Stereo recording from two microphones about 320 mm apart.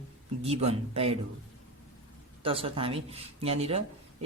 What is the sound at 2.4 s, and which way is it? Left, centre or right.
Speech, centre.